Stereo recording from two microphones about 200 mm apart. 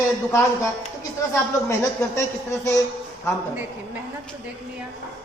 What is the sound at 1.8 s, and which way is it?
A man's voice, 15° left (ahead or behind).